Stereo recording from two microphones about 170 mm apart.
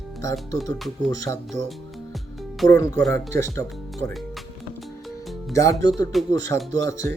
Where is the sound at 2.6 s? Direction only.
20° left (ahead or behind).